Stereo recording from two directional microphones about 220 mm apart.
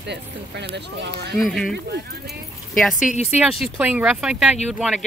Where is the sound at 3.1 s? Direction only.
30° left (ahead or behind).